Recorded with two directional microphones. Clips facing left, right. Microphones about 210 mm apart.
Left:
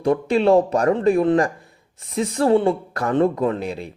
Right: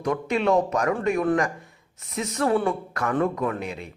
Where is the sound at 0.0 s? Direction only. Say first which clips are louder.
Left 6 dB; 30° left (ahead or behind).